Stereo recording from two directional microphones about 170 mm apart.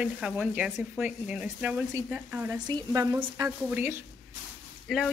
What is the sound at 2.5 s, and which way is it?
A woman's voice, 20° right (ahead or behind).